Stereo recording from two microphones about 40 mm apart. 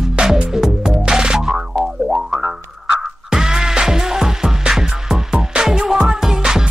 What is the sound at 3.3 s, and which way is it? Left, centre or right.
Music, centre.